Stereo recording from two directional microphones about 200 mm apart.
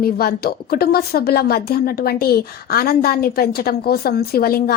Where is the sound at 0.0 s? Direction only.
50° left (ahead or behind).